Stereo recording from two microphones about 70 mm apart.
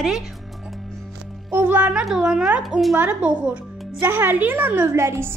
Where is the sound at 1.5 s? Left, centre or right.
Right.